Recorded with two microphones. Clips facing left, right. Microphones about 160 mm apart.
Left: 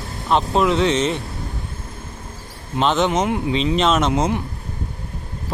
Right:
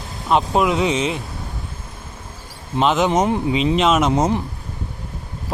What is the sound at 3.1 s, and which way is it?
Speech, 40° right (ahead or behind).